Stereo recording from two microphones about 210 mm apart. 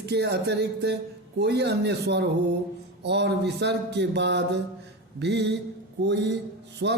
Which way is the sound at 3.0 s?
55° right (ahead or behind).